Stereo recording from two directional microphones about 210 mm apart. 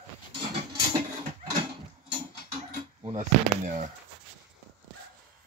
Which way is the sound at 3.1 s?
35° right (ahead or behind).